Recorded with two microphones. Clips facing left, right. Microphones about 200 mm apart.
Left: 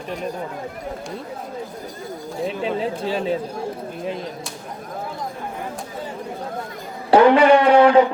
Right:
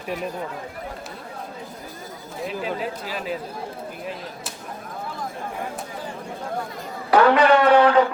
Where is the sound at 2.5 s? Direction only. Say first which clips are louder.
Left 3 dB; 30° left (ahead or behind).